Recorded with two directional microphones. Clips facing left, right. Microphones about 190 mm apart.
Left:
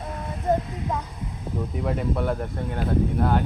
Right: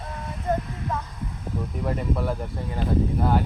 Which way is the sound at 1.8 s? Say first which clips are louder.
Left 1 dB; centre (ahead or behind).